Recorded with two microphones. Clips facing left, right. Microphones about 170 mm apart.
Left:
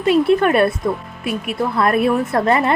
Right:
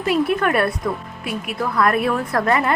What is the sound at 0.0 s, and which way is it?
A woman's voice, 25° left (ahead or behind).